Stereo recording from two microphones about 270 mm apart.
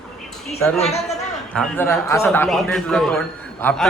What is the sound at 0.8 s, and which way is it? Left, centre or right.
Speech, left.